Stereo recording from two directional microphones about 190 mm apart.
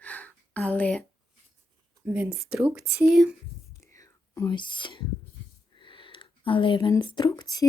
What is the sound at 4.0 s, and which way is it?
Whispering, 15° left (ahead or behind).